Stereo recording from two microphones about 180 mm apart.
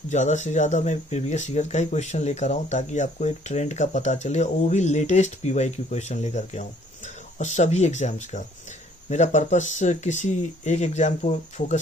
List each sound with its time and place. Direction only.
0.1 s speech: 40° left (ahead or behind)